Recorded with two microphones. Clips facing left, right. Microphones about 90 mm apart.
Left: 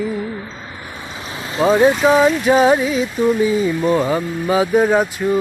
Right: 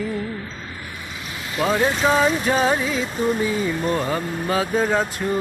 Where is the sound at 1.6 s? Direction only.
20° left (ahead or behind).